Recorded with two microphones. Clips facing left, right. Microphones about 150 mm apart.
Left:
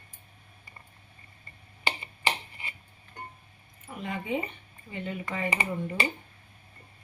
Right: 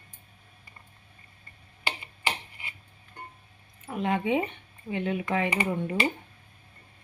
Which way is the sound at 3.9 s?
90° right.